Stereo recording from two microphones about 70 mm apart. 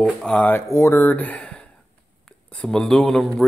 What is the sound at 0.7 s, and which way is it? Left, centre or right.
Speech, left.